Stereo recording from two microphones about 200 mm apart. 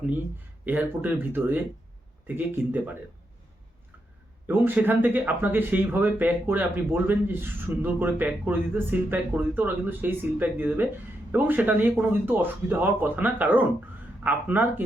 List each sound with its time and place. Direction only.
0.6 s speech: 10° right (ahead or behind)
4.4 s speech: 10° right (ahead or behind)